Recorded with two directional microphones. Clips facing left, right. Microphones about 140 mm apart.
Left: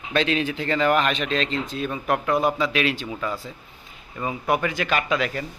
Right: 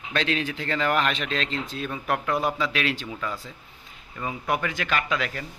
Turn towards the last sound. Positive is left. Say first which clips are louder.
# left 3 dB
turn(degrees=20)  # may be behind; listen again after turning